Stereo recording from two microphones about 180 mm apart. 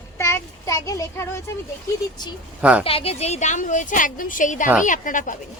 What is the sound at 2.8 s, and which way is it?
A woman's voice, 30° left (ahead or behind).